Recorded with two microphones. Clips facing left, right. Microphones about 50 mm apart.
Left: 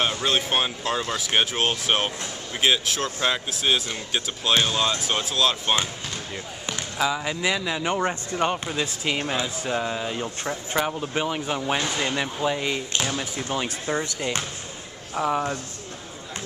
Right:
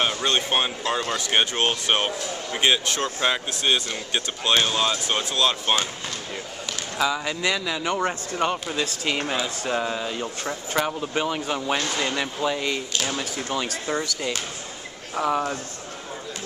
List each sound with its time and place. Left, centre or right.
0.0 s speech: centre
7.2 s speech: centre
15.1 s speech: centre